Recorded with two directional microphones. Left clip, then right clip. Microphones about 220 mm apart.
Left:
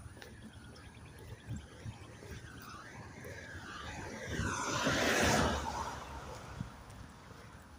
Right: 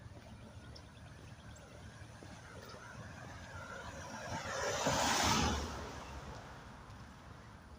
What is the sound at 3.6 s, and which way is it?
Vehicle, 40° right (ahead or behind).